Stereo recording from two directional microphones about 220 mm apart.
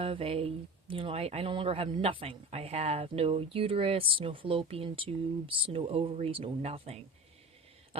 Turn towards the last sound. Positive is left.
turn(degrees=-30)  # may be behind; listen again after turning